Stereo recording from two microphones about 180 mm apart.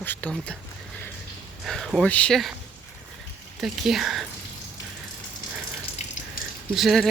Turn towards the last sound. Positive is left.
turn(degrees=0)  # may be behind; listen again after turning